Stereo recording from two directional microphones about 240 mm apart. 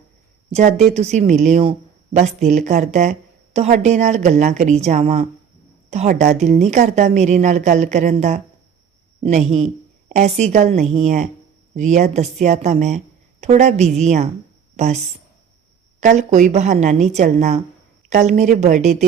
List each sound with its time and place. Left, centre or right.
0.9 s a woman's voice: right